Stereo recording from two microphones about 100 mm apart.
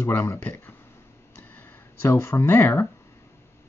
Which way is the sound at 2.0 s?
25° left (ahead or behind).